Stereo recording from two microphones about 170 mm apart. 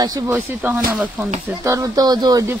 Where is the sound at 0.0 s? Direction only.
20° right (ahead or behind).